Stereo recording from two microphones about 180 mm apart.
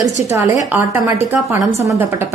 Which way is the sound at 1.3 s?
15° right (ahead or behind).